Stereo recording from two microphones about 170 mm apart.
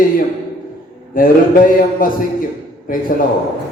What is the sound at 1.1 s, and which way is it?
Speech, 55° left (ahead or behind).